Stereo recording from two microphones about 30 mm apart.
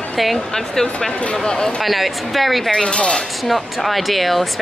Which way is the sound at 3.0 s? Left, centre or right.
Left.